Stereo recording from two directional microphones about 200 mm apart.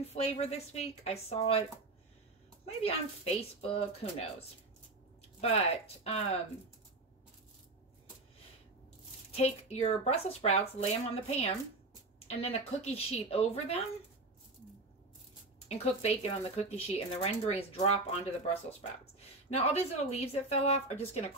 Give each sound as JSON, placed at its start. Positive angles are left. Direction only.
{"t": 0.0, "sound": "speech", "side_deg": 30}
{"t": 2.6, "sound": "speech", "side_deg": 30}
{"t": 6.0, "sound": "speech", "side_deg": 30}
{"t": 9.3, "sound": "speech", "side_deg": 30}
{"t": 15.8, "sound": "speech", "side_deg": 30}
{"t": 19.1, "sound": "speech", "side_deg": 35}